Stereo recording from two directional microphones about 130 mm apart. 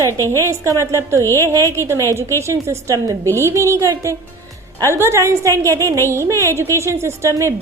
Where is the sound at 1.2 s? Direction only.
20° left (ahead or behind).